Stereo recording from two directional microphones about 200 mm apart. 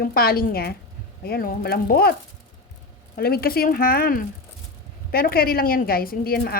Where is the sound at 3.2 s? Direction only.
50° left (ahead or behind).